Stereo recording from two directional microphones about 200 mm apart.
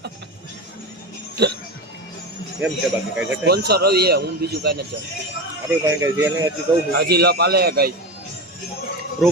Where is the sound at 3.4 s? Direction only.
55° right (ahead or behind).